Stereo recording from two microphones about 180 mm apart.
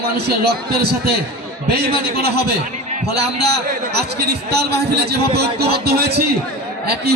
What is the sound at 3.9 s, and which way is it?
A man's voice, 65° right (ahead or behind).